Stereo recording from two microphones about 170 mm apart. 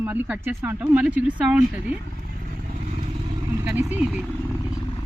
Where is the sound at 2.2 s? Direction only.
55° right (ahead or behind).